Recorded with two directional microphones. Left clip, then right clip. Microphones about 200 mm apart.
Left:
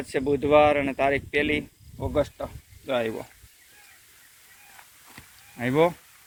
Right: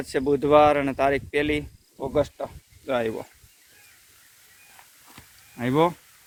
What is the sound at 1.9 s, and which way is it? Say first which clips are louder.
Speech: right 2 dB; 35° right (ahead or behind).